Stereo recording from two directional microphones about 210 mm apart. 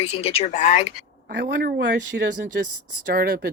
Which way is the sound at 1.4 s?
60° right (ahead or behind).